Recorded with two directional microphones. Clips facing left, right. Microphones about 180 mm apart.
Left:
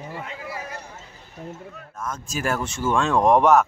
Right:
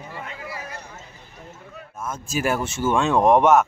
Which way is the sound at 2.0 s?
5° right (ahead or behind).